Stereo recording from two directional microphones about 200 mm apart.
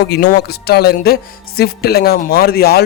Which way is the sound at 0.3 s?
50° left (ahead or behind).